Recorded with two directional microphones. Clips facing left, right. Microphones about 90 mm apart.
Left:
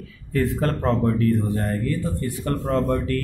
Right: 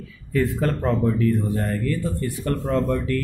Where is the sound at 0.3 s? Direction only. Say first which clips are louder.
Even; 40° left (ahead or behind).